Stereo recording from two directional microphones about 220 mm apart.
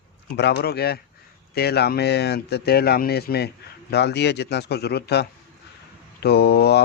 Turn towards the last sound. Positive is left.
turn(degrees=45)  # may be behind; listen again after turning